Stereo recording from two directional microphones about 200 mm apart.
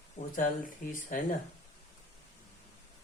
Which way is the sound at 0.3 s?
40° left (ahead or behind).